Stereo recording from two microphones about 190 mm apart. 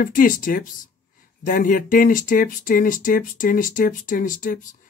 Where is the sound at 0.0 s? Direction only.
45° left (ahead or behind).